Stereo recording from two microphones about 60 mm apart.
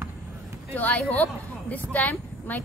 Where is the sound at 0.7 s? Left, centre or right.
Left.